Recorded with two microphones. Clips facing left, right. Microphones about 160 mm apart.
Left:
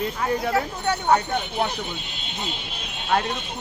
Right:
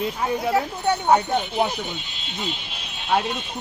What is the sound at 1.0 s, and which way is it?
Speech, 20° right (ahead or behind).